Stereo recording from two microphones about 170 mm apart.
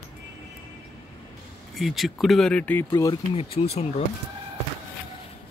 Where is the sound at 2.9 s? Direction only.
25° left (ahead or behind).